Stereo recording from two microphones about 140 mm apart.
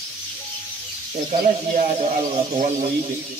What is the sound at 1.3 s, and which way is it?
Speech, 55° right (ahead or behind).